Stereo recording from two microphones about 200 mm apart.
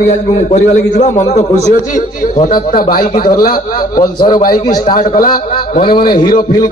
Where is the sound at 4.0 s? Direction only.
20° left (ahead or behind).